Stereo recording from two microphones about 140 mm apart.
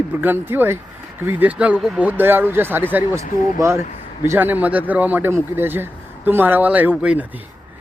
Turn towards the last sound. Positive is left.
turn(degrees=-10)  # may be behind; listen again after turning